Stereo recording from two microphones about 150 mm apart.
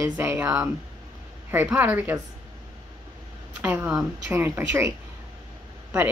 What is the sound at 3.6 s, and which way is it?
Speech, 15° right (ahead or behind).